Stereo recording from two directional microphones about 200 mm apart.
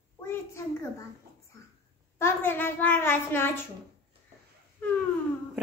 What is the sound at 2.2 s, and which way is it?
A child's voice, 10° left (ahead or behind).